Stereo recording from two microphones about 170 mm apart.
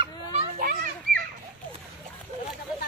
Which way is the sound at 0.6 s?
60° right (ahead or behind).